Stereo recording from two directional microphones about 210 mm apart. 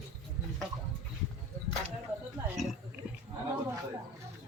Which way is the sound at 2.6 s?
Centre (ahead or behind).